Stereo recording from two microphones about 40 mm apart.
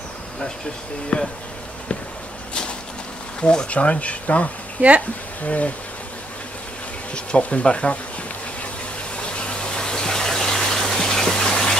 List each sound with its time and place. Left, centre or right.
1.1 s speech: left
3.3 s speech: left
4.8 s speech: right
5.4 s speech: left
7.2 s speech: left
9.2 s gush: left